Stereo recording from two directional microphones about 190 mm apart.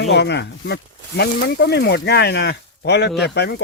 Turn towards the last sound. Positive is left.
turn(degrees=60)  # may be behind; listen again after turning